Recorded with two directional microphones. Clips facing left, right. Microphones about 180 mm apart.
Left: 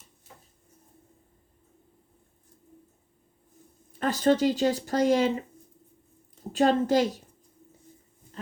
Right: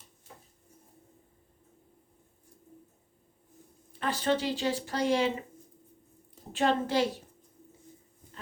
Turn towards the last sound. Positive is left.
turn(degrees=40)  # may be behind; listen again after turning